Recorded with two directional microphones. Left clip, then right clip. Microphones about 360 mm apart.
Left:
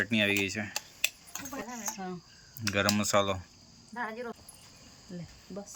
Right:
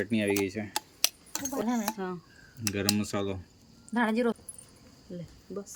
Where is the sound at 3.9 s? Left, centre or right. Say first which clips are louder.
Right 9 dB; right.